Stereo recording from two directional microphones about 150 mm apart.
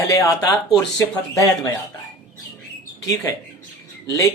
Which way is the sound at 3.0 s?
20° left (ahead or behind).